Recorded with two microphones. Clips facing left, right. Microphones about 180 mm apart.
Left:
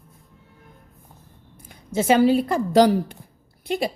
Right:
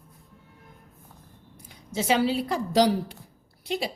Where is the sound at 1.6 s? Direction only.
50° left (ahead or behind).